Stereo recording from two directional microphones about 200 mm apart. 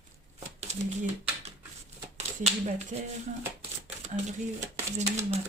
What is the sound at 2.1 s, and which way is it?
Speech, 35° right (ahead or behind).